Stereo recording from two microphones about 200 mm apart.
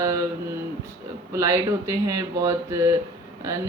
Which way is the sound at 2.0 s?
20° right (ahead or behind).